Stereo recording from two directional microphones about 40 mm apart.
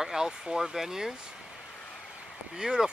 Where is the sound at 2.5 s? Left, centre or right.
Centre.